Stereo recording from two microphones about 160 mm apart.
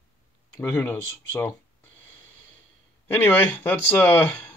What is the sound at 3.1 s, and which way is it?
Speech, 10° left (ahead or behind).